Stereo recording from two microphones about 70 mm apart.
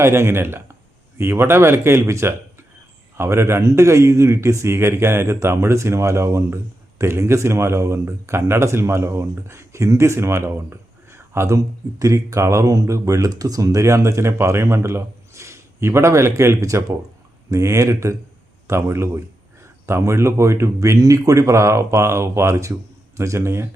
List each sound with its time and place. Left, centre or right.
0.0 s a man's voice: right